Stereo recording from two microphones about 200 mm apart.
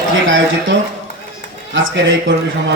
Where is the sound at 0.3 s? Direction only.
70° right (ahead or behind).